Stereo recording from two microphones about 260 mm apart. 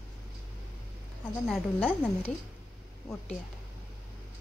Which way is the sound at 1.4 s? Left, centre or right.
Centre.